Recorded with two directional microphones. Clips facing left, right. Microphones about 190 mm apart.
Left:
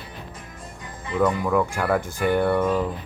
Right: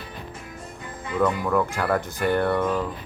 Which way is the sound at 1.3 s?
5° left (ahead or behind).